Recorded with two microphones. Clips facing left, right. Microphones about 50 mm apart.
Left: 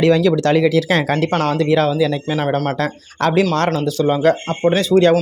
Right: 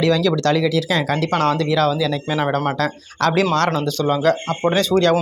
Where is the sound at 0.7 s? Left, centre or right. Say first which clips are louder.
Left 3 dB; left.